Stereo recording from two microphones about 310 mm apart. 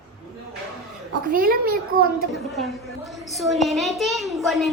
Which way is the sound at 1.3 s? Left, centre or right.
Right.